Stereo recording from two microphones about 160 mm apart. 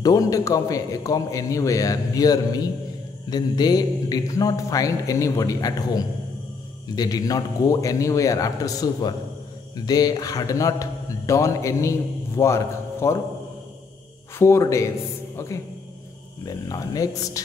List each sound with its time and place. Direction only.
0.0 s a man's voice: 20° left (ahead or behind)
14.4 s a man's voice: 15° left (ahead or behind)